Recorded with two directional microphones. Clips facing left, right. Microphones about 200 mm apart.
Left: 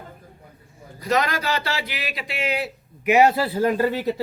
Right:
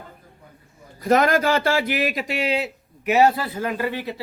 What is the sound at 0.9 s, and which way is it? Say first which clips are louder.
Speech: right 5 dB; 50° right (ahead or behind).